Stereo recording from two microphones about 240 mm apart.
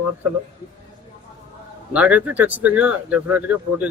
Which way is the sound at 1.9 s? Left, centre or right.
Centre.